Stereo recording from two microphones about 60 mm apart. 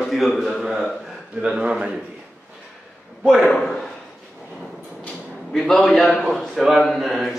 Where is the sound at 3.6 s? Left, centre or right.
Centre.